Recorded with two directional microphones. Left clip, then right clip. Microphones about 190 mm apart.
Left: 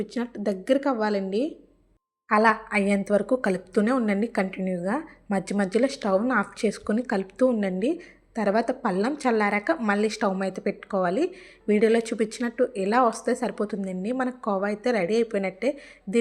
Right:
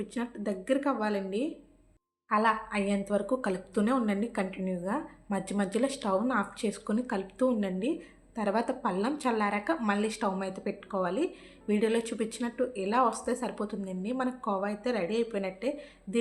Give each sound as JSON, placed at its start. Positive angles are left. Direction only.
{"t": 0.0, "sound": "a woman's voice", "side_deg": 30}